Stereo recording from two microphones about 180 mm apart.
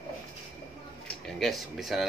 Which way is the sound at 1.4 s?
Centre (ahead or behind).